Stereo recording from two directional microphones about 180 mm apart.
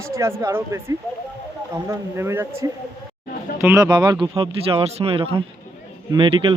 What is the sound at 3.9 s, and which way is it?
Speech, 25° right (ahead or behind).